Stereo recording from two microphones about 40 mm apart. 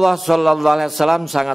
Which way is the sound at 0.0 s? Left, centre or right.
Centre.